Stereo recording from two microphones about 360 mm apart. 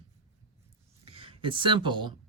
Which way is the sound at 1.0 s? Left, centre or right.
Centre.